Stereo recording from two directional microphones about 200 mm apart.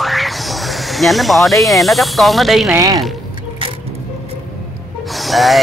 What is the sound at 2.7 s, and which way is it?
Speech, 15° right (ahead or behind).